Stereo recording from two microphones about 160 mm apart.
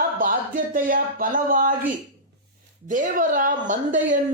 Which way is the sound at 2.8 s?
55° right (ahead or behind).